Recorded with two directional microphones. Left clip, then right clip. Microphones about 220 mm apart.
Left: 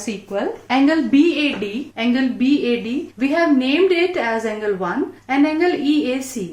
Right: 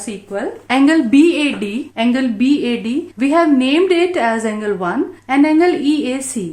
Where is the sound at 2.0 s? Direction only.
50° right (ahead or behind).